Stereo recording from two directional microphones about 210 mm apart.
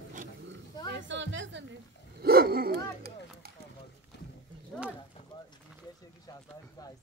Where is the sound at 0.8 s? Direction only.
60° right (ahead or behind).